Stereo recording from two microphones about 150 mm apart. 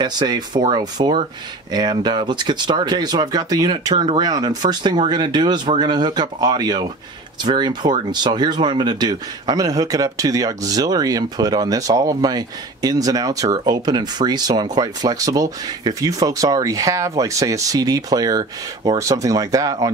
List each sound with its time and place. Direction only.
0.0 s speech: 30° right (ahead or behind)